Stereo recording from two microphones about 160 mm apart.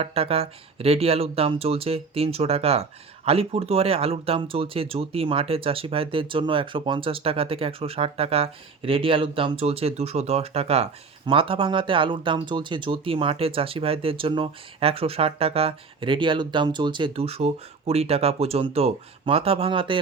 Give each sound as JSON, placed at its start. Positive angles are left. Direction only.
{"t": 0.0, "sound": "speech", "side_deg": -35}